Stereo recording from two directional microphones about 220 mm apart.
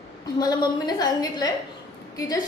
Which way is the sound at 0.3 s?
20° left (ahead or behind).